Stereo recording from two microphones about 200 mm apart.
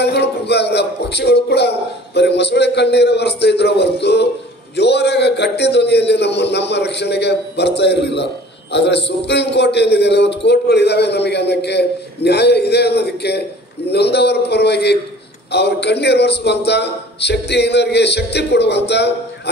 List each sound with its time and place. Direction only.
0.0 s a man's voice: 55° left (ahead or behind)